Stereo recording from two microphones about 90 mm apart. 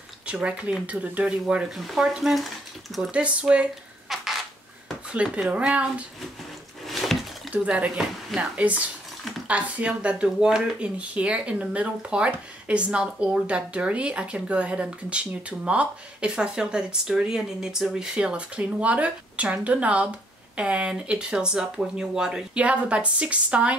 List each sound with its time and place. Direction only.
0.3 s speech: 10° right (ahead or behind)
3.0 s speech: 10° right (ahead or behind)
4.1 s a sound: 5° right (ahead or behind)
5.1 s speech: 10° right (ahead or behind)
6.9 s a sound: centre (ahead or behind)
7.5 s speech: 15° right (ahead or behind)